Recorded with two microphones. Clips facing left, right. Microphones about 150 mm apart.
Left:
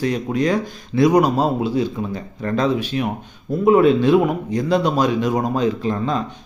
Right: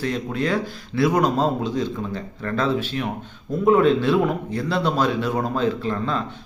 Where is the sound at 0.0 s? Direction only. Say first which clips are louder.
Left 5 dB; 15° left (ahead or behind).